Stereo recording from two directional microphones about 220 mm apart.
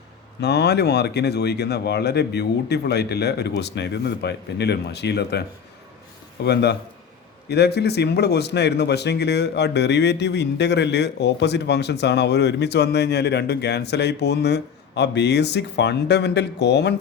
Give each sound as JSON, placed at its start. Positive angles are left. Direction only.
{"t": 0.4, "sound": "a man's voice", "side_deg": 50}